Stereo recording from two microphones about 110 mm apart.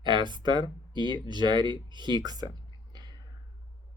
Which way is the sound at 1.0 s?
40° left (ahead or behind).